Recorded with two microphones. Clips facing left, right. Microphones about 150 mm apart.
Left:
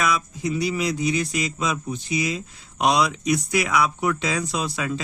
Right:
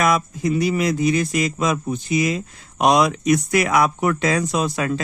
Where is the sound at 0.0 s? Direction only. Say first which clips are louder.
Right 5 dB; 50° right (ahead or behind).